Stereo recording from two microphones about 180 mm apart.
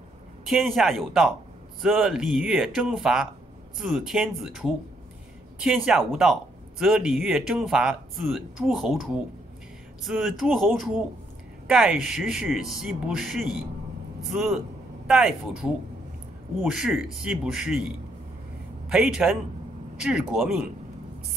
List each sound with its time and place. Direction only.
0.5 s speech: centre (ahead or behind)